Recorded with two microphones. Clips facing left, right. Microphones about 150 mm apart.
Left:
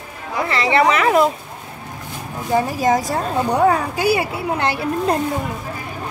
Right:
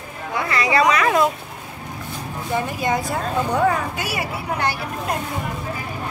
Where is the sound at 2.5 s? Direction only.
40° left (ahead or behind).